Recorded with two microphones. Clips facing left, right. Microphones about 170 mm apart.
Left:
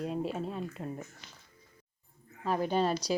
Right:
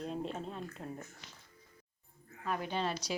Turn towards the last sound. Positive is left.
turn(degrees=40)  # may be behind; listen again after turning